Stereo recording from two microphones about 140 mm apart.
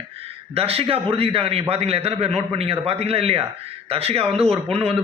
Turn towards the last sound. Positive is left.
turn(degrees=-45)  # may be behind; listen again after turning